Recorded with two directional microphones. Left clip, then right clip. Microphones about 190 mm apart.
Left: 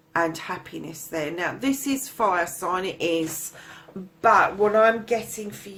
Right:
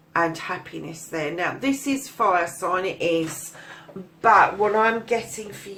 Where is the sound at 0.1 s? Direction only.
35° left (ahead or behind).